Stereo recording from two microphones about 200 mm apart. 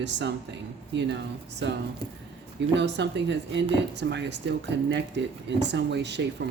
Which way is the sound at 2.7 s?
60° right (ahead or behind).